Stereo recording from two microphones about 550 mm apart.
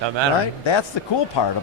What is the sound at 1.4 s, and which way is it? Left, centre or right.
Speech, left.